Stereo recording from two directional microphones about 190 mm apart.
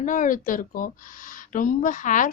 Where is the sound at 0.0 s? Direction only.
45° left (ahead or behind).